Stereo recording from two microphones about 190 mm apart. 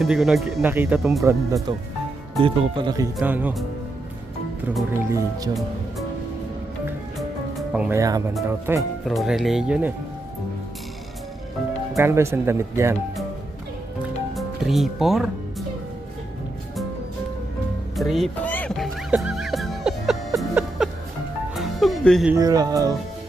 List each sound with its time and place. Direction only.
0.0 s speech: centre (ahead or behind)
1.2 s speech: 15° right (ahead or behind)
3.2 s speech: 10° right (ahead or behind)
4.9 s speech: 15° right (ahead or behind)
7.7 s speech: 5° right (ahead or behind)
7.9 s speech: 20° right (ahead or behind)
9.0 s speech: centre (ahead or behind)
11.9 s speech: 15° right (ahead or behind)
14.0 s music: centre (ahead or behind)
17.9 s music: centre (ahead or behind)
22.4 s speech: 20° right (ahead or behind)